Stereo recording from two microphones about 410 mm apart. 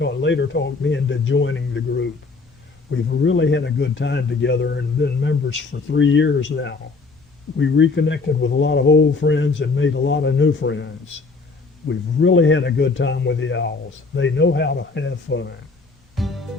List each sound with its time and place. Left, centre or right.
0.0 s speech: left
16.1 s music: centre